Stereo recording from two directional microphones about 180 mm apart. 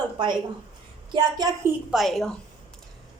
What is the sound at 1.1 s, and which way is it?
Speech, 20° right (ahead or behind).